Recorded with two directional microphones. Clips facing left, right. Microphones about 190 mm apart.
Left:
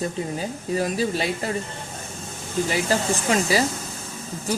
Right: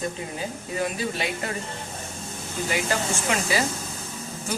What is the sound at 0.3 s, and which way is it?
Speech, 35° left (ahead or behind).